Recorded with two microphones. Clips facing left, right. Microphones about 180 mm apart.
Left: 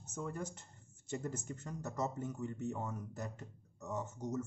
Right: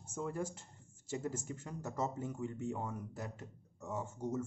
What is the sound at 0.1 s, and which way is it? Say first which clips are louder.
Speech: right 3 dB; 10° right (ahead or behind).